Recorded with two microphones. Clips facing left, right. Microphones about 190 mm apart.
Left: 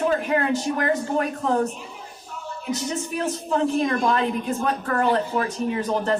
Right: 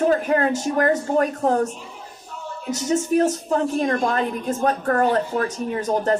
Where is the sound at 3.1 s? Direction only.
45° right (ahead or behind).